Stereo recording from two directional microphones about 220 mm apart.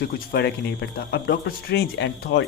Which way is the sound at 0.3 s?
45° left (ahead or behind).